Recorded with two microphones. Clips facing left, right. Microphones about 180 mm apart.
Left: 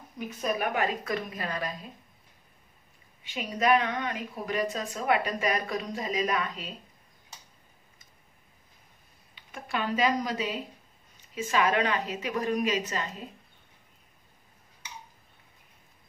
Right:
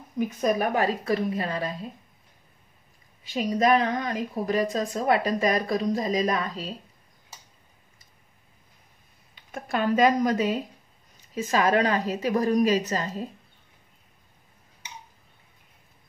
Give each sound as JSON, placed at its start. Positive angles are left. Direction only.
{"t": 0.4, "sound": "a woman's voice", "side_deg": -40}
{"t": 3.3, "sound": "a woman's voice", "side_deg": -35}
{"t": 9.3, "sound": "a woman's voice", "side_deg": -45}